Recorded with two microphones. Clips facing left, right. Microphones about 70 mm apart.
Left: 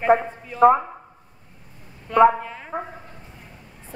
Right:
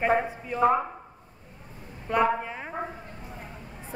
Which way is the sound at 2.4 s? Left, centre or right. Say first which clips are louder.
Even; centre.